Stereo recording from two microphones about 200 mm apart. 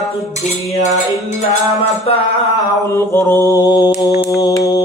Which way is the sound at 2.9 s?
15° left (ahead or behind).